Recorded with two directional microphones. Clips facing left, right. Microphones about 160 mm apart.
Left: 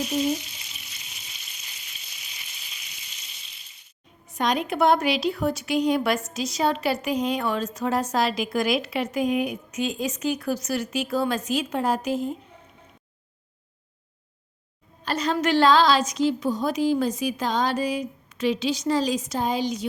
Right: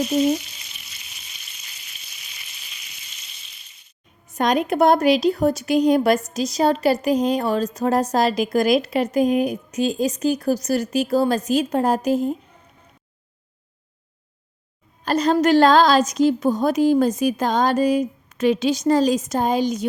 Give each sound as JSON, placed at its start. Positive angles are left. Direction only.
{"t": 0.1, "sound": "a woman's voice", "side_deg": -40}
{"t": 4.3, "sound": "a woman's voice", "side_deg": -50}
{"t": 15.0, "sound": "a woman's voice", "side_deg": -40}